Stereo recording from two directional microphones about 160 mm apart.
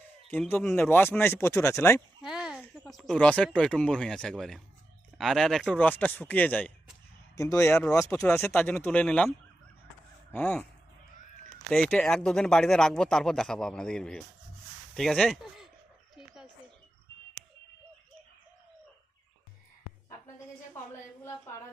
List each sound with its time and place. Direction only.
0.3 s speech: 15° left (ahead or behind)
2.2 s speech: 5° right (ahead or behind)
10.3 s speech: 10° left (ahead or behind)
11.7 s speech: 5° left (ahead or behind)
16.1 s a sound: 5° right (ahead or behind)